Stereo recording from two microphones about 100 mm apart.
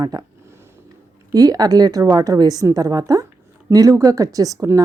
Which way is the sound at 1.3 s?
40° right (ahead or behind).